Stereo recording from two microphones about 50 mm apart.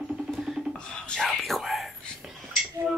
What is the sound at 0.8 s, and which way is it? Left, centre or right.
Whispering, centre.